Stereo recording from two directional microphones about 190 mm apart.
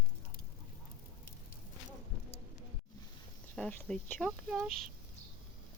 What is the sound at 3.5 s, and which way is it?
Speech, 5° left (ahead or behind).